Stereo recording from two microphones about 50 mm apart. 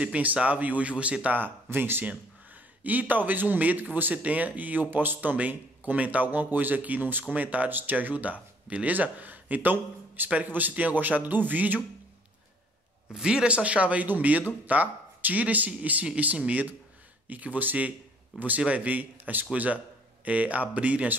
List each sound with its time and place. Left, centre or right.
0.0 s speech: right
1.4 s speech: right
2.0 s speech: right
4.1 s speech: right
13.1 s speech: centre